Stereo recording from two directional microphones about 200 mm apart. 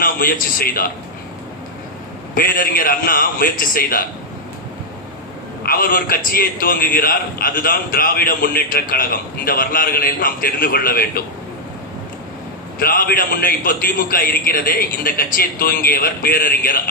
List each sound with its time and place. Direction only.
0.0 s a man's voice: 45° left (ahead or behind)
2.3 s a man's voice: 45° left (ahead or behind)
5.6 s a man's voice: 45° left (ahead or behind)
12.8 s a man's voice: 45° left (ahead or behind)